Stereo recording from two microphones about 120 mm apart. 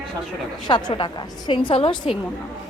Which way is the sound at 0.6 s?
40° left (ahead or behind).